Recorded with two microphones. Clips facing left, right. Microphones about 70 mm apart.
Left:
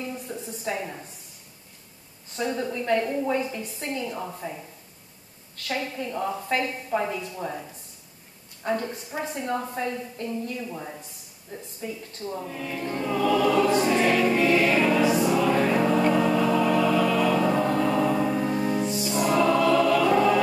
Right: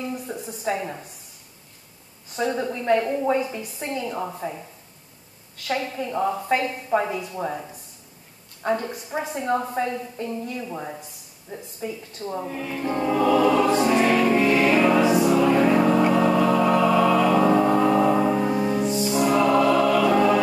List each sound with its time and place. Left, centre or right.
0.1 s a sound: centre
2.4 s music: right
2.7 s a woman's voice: centre
3.9 s music: right
5.7 s music: centre
7.3 s a woman's voice: centre
8.6 s a woman's voice: centre
11.8 s music: right